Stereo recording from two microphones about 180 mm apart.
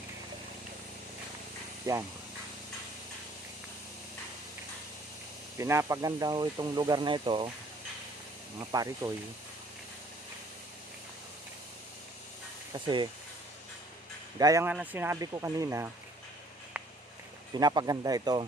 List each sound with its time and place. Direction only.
1.9 s speech: 20° right (ahead or behind)
5.5 s speech: 15° right (ahead or behind)
8.7 s speech: 20° right (ahead or behind)
12.7 s speech: 25° right (ahead or behind)
14.3 s speech: 20° right (ahead or behind)
17.5 s speech: 20° right (ahead or behind)